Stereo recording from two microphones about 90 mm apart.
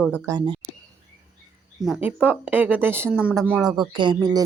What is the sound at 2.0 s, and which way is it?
Speech, 15° right (ahead or behind).